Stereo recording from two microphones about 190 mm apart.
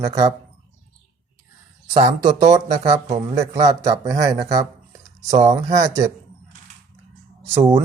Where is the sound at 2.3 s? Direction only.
20° right (ahead or behind).